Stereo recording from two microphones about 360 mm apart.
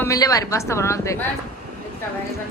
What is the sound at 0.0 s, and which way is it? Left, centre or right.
A woman's voice, centre.